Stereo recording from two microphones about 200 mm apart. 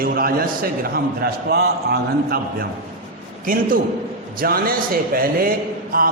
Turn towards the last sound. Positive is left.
turn(degrees=-45)  # may be behind; listen again after turning